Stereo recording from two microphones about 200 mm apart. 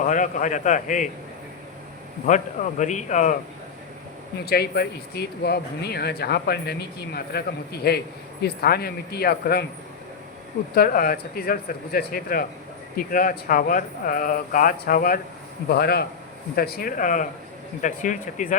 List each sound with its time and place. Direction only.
0.0 s a man's voice: 40° left (ahead or behind)
2.2 s a man's voice: 35° left (ahead or behind)
4.4 s speech: 50° left (ahead or behind)
10.8 s a man's voice: 45° left (ahead or behind)